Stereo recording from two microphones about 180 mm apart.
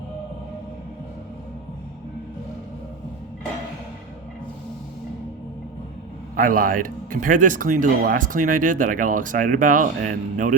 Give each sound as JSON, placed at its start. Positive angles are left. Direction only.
{"t": 6.3, "sound": "speech", "side_deg": -50}